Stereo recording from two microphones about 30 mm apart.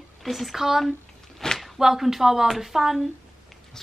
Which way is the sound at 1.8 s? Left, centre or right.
Centre.